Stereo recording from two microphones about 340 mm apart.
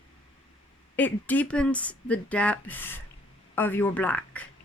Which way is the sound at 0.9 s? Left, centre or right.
Centre.